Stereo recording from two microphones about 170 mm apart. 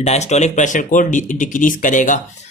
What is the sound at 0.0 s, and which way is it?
Speech, 40° left (ahead or behind).